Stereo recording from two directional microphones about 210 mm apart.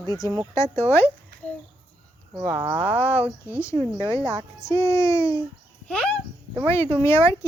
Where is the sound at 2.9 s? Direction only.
10° left (ahead or behind).